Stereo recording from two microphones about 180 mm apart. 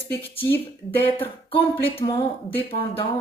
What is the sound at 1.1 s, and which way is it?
Speech, 30° left (ahead or behind).